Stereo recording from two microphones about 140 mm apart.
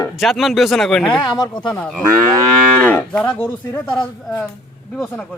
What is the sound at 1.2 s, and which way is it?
Speech, 30° left (ahead or behind).